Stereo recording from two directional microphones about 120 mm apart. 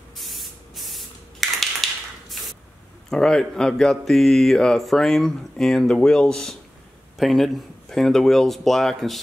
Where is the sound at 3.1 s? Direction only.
5° left (ahead or behind).